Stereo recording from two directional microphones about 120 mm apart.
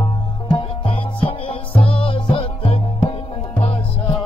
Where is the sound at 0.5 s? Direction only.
50° left (ahead or behind).